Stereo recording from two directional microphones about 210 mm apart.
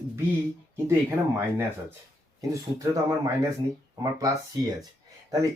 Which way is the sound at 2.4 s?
15° right (ahead or behind).